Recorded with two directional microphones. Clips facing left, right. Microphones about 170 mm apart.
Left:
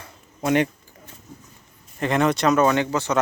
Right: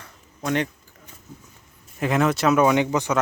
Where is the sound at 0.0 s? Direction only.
15° left (ahead or behind).